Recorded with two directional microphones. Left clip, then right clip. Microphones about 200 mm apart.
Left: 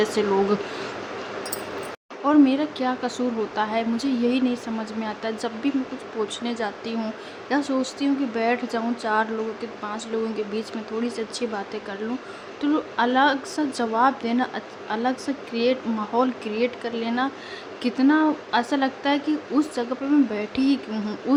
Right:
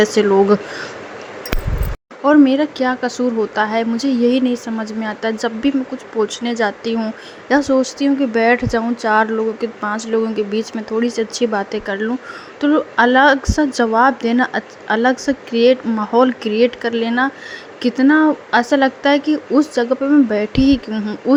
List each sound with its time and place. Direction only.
0.0 s a woman's voice: 30° right (ahead or behind)
2.2 s a woman's voice: 25° right (ahead or behind)